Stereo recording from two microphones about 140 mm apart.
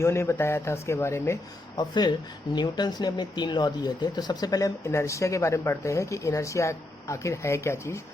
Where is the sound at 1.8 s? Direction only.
30° left (ahead or behind).